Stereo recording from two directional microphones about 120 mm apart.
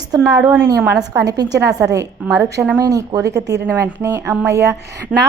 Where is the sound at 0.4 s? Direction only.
15° right (ahead or behind).